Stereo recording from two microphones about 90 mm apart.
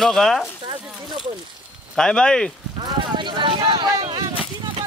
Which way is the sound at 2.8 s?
60° right (ahead or behind).